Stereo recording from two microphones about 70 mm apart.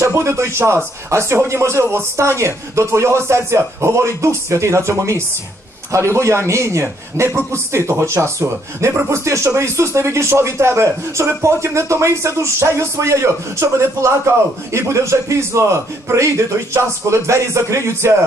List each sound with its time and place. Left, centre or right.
0.0 s speech: right
17.3 s speech: right